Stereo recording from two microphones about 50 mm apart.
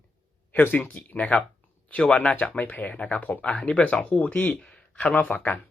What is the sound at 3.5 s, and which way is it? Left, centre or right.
Speech, left.